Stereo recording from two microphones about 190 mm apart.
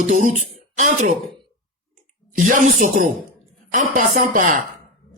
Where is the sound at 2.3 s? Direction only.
45° right (ahead or behind).